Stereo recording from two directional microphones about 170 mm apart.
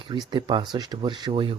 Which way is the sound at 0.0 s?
30° right (ahead or behind).